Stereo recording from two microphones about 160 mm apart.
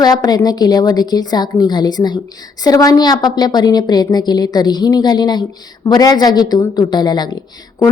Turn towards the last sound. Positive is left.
turn(degrees=25)  # may be behind; listen again after turning